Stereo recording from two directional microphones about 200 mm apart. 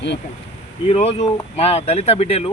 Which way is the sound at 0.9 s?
30° left (ahead or behind).